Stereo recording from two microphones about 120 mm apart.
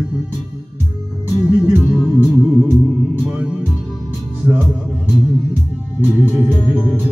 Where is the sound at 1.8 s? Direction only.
5° left (ahead or behind).